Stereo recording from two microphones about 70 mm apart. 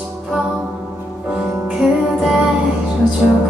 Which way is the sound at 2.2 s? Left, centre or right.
Centre.